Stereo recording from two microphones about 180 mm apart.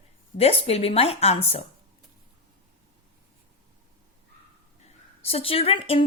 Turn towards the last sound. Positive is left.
turn(degrees=30)  # may be behind; listen again after turning